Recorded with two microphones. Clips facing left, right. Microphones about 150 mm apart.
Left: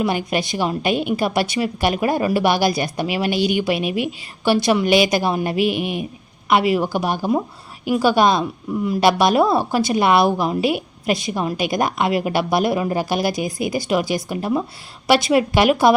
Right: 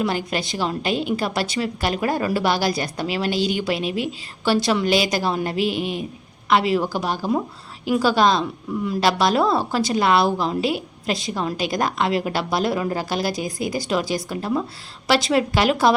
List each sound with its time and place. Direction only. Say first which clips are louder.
0.0 s a woman's voice: left 3 dB; 15° left (ahead or behind)